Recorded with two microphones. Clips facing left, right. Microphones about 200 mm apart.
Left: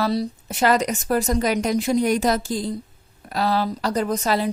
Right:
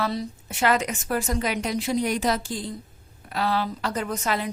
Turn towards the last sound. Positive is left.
turn(degrees=35)  # may be behind; listen again after turning